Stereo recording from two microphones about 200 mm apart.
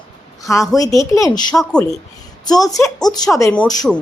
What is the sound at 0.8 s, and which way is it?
Speech, 15° left (ahead or behind).